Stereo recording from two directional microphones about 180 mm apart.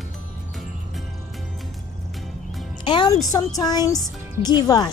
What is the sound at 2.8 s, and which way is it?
Music, 25° left (ahead or behind).